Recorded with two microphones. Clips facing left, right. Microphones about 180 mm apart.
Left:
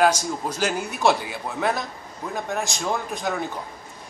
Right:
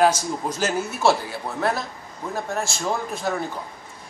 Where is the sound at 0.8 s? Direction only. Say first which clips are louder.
Right 2 dB; 15° left (ahead or behind).